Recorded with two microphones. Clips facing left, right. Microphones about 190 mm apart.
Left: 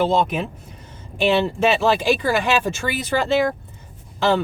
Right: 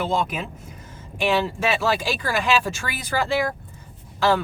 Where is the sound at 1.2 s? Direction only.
25° left (ahead or behind).